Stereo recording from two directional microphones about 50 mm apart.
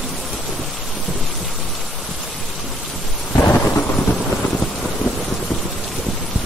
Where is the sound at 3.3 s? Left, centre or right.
Left.